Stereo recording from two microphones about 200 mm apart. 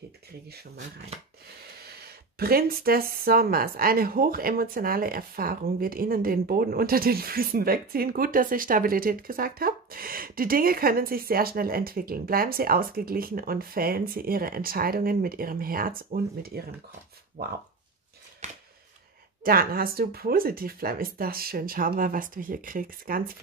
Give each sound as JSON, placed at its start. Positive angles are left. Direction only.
{"t": 1.8, "sound": "speech", "side_deg": -50}
{"t": 19.4, "sound": "speech", "side_deg": -45}